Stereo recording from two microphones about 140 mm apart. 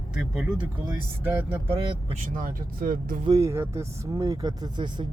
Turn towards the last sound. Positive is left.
turn(degrees=-30)  # may be behind; listen again after turning